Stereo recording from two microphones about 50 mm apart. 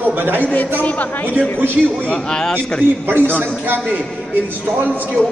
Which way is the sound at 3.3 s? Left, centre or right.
Left.